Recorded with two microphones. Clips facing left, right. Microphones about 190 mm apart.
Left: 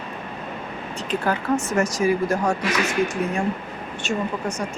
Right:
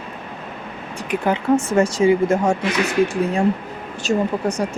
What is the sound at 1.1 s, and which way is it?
Speech, 20° right (ahead or behind).